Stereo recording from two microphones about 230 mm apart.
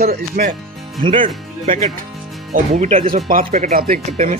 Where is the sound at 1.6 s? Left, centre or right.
Right.